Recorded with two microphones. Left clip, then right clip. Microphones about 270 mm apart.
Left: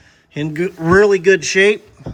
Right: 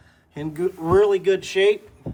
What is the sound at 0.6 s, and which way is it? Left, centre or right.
Speech, left.